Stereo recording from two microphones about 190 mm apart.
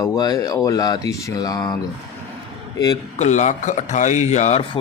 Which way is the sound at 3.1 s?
40° left (ahead or behind).